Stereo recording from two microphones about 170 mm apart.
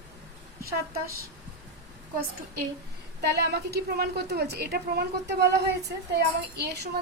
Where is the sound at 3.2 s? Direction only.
80° right.